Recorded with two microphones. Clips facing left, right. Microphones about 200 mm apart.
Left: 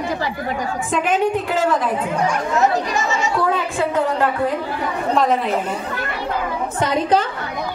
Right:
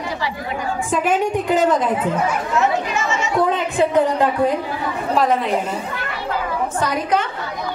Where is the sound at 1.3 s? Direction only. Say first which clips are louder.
Right 2 dB; 15° right (ahead or behind).